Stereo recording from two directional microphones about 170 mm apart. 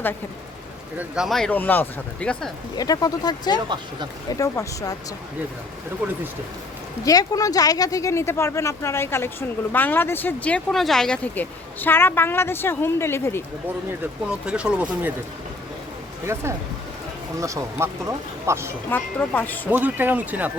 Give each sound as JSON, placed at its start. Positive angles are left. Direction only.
{"t": 0.9, "sound": "speech", "side_deg": -5}
{"t": 2.7, "sound": "speech", "side_deg": 20}
{"t": 7.0, "sound": "speech", "side_deg": 20}
{"t": 14.0, "sound": "speech", "side_deg": -5}
{"t": 16.2, "sound": "speech", "side_deg": -15}
{"t": 18.9, "sound": "speech", "side_deg": 10}
{"t": 19.7, "sound": "speech", "side_deg": -10}